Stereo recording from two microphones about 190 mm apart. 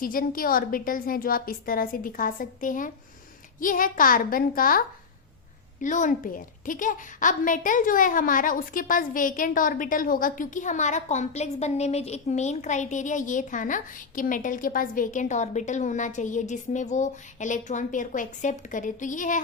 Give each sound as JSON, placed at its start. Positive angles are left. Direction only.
{"t": 0.0, "sound": "a woman's voice", "side_deg": 50}
{"t": 5.8, "sound": "a woman's voice", "side_deg": 40}